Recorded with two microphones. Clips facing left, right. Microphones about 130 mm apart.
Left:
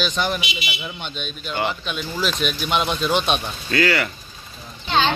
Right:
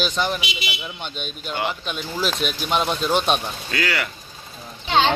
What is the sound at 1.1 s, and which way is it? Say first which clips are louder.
Speech: even; 45° right (ahead or behind).